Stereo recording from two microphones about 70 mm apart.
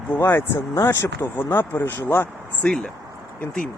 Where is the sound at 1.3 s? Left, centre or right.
Left.